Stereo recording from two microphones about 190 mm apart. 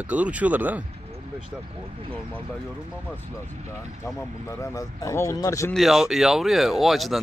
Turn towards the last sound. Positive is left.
turn(degrees=0)  # may be behind; listen again after turning